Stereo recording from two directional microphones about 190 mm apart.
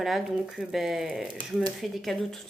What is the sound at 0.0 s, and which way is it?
Speech, centre (ahead or behind).